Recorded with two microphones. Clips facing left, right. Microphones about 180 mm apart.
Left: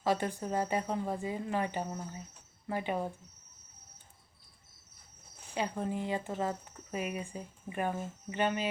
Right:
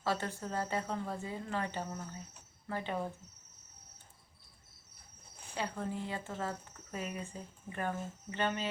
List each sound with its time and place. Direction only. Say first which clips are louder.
0.0 s speech: left 4 dB; 15° left (ahead or behind)
5.5 s speech: left 4 dB; 15° left (ahead or behind)